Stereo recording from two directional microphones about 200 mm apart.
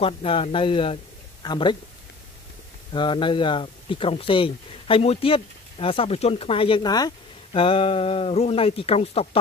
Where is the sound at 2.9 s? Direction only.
25° left (ahead or behind).